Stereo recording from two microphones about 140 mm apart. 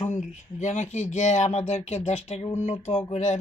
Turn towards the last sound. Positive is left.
turn(degrees=55)  # may be behind; listen again after turning